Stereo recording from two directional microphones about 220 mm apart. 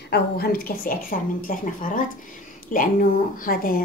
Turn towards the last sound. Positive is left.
turn(degrees=40)  # may be behind; listen again after turning